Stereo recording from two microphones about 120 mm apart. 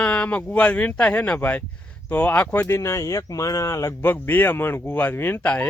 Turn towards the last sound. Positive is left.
turn(degrees=15)  # may be behind; listen again after turning